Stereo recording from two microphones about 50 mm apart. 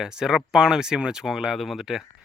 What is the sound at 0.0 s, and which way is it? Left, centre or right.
Speech, centre.